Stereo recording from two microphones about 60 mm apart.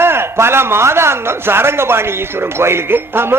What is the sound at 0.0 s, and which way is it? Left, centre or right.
A man's voice, right.